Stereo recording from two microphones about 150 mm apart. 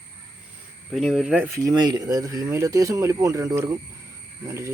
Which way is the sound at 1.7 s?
30° right (ahead or behind).